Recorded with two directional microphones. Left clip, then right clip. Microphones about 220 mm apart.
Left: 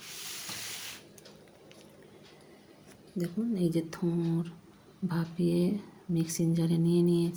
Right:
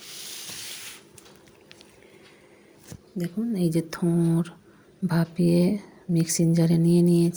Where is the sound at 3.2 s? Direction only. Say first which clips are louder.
Right 4 dB; 25° right (ahead or behind).